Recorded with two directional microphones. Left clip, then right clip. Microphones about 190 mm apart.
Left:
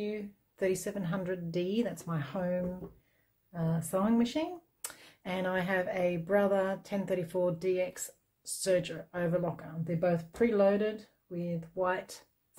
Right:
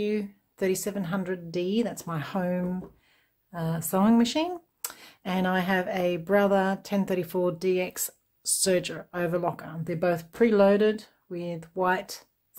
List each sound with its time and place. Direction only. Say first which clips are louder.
0.6 s speech: right 4 dB; 25° right (ahead or behind)